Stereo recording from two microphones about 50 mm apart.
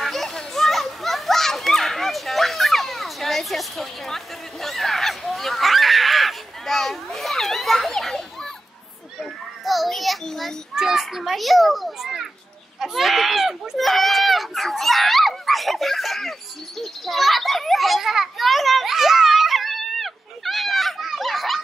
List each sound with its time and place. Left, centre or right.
0.0 s children playing: centre
9.2 s children playing: centre
10.7 s a child's voice: centre
12.8 s a sound: centre